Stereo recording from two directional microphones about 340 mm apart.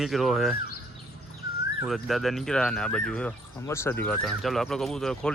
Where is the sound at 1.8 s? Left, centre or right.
Centre.